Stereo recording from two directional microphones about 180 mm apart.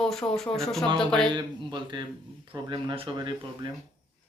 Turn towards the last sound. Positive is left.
turn(degrees=-25)  # may be behind; listen again after turning